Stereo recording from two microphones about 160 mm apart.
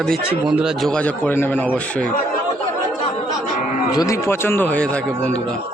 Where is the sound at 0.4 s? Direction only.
5° right (ahead or behind).